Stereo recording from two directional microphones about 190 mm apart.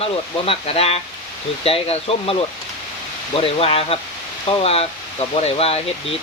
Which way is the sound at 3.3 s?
30° left (ahead or behind).